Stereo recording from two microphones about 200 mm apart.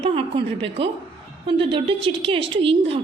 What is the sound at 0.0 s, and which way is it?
A woman's voice, 30° right (ahead or behind).